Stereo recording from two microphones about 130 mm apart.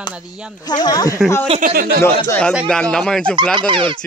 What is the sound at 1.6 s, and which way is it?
Speech, 90° right.